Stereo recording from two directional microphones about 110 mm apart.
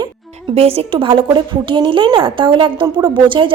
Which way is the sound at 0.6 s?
60° right (ahead or behind).